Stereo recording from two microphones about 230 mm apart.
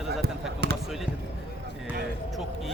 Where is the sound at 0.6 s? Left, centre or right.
Right.